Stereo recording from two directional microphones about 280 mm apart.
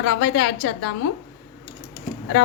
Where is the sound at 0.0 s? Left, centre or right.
Left.